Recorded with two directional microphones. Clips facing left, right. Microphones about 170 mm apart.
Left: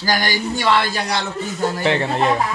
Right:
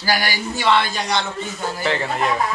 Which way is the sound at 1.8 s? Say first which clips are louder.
Left 2 dB; 25° left (ahead or behind).